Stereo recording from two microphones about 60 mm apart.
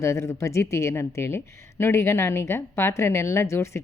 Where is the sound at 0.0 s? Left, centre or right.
Left.